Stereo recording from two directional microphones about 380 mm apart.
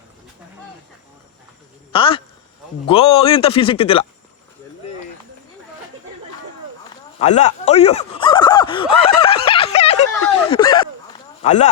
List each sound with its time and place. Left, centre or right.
1.9 s speech: centre
7.2 s a sound: centre
10.5 s speech: centre